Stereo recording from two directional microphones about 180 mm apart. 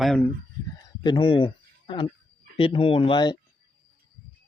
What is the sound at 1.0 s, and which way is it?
Speech, 25° left (ahead or behind).